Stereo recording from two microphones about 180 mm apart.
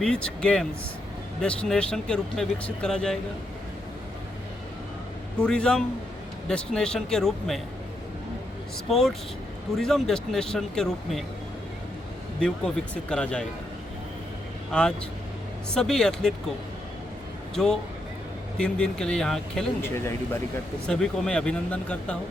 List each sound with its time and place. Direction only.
0.0 s speech: 5° left (ahead or behind)
5.4 s speech: 5° left (ahead or behind)
8.9 s speech: centre (ahead or behind)
12.4 s speech: 5° left (ahead or behind)
14.7 s speech: 5° left (ahead or behind)
17.5 s a man's voice: 5° left (ahead or behind)